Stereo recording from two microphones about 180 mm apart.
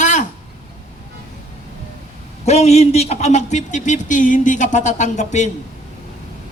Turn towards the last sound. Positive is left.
turn(degrees=40)  # may be behind; listen again after turning